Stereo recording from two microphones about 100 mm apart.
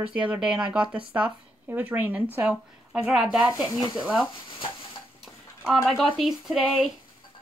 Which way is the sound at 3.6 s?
45° left (ahead or behind).